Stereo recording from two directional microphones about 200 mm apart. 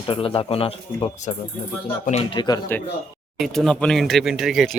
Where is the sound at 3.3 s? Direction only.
Centre (ahead or behind).